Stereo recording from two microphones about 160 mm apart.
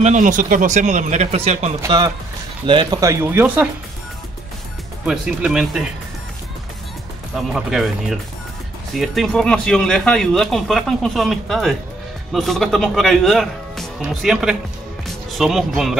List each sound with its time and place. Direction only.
0.0 s speech: 50° right (ahead or behind)
1.9 s speech: 25° right (ahead or behind); by 3.6 s 10° right (ahead or behind)
5.0 s speech: 5° right (ahead or behind)
7.3 s speech: centre (ahead or behind)